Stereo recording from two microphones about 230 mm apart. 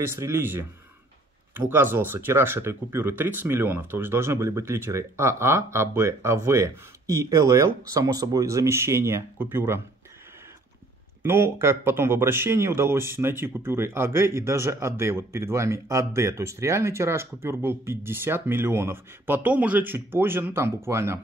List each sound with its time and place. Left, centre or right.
0.1 s speech: centre
11.2 s speech: centre